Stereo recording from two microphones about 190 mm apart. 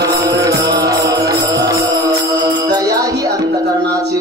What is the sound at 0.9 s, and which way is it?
Mantra, 20° right (ahead or behind).